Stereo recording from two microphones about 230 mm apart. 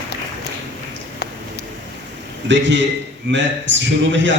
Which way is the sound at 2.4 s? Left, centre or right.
Right.